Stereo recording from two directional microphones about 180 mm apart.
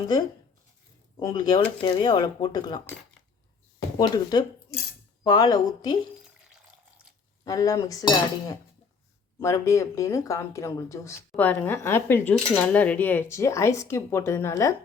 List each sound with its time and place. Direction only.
1.1 s speech: 20° left (ahead or behind)
3.9 s speech: 25° left (ahead or behind)
7.4 s speech: 20° left (ahead or behind)